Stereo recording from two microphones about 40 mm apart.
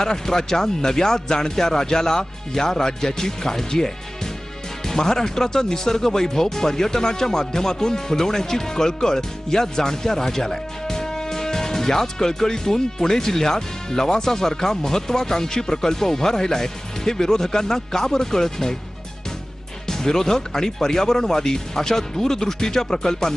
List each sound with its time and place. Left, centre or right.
0.0 s speech: centre
19.9 s speech: centre